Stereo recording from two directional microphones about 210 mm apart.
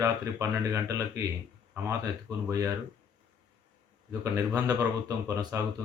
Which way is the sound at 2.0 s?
15° right (ahead or behind).